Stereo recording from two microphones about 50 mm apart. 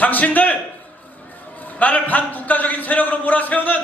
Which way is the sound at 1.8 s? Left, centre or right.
Left.